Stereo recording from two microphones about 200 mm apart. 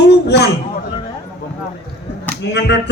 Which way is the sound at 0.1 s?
55° left (ahead or behind).